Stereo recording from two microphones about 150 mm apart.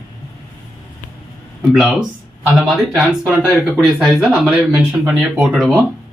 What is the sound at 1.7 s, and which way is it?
Speech, centre (ahead or behind).